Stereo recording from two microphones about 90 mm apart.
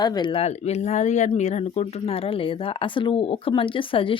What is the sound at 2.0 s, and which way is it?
Speech, 90° left.